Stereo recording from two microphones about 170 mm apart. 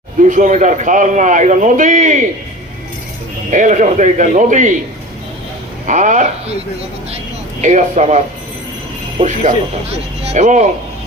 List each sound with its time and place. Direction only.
0.3 s a man's voice: 45° right (ahead or behind)
3.5 s a man's voice: 50° right (ahead or behind)
5.8 s a man's voice: 50° right (ahead or behind)
7.6 s a man's voice: 45° right (ahead or behind)
9.2 s a man's voice: 40° right (ahead or behind)